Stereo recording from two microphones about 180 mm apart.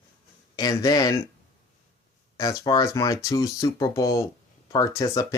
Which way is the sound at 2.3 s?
20° left (ahead or behind).